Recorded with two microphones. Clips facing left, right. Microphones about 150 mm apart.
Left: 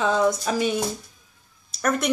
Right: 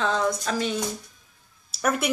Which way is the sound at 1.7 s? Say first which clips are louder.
Left 2 dB; 5° right (ahead or behind).